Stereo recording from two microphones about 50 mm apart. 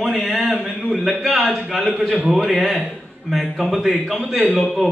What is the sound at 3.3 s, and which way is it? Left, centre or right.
Speech, centre.